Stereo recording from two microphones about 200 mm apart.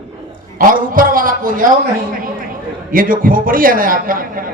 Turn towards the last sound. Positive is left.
turn(degrees=-45)  # may be behind; listen again after turning